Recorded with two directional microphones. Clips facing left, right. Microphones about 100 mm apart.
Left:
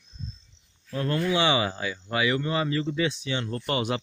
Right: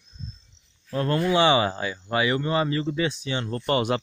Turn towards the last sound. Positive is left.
turn(degrees=-45)  # may be behind; listen again after turning